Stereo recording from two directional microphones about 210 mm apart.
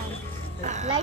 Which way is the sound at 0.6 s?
35° right (ahead or behind).